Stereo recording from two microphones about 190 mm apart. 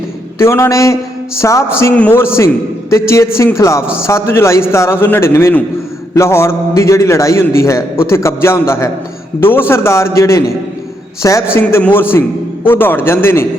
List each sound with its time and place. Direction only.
0.3 s a man's voice: 15° left (ahead or behind)